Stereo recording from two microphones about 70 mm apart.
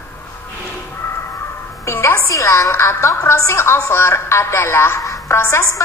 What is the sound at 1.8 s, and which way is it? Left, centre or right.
A woman's voice, left.